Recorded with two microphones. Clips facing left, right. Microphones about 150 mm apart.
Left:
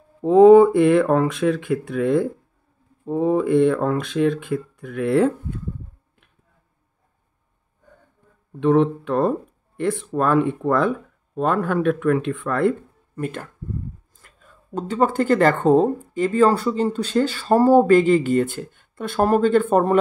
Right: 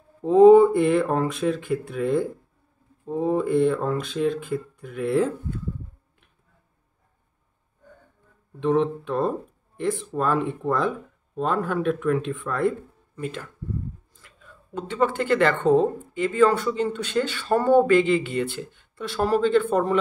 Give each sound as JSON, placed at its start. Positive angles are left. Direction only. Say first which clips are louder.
{"t": 0.3, "sound": "speech", "louder": "left 2 dB", "side_deg": 90}
{"t": 8.5, "sound": "speech", "louder": "left 5 dB", "side_deg": 75}